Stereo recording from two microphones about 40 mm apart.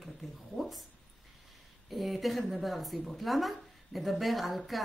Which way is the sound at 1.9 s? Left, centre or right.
Centre.